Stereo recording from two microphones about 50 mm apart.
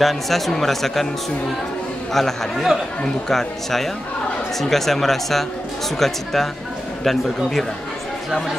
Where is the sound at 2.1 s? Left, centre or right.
Centre.